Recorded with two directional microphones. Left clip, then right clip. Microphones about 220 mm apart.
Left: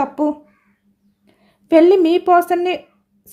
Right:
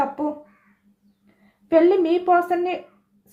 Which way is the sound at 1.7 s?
55° left (ahead or behind).